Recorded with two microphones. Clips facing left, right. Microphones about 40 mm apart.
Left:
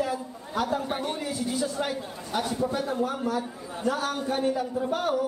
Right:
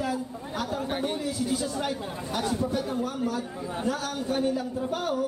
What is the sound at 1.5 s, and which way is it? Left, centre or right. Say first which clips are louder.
A man's voice: even; centre.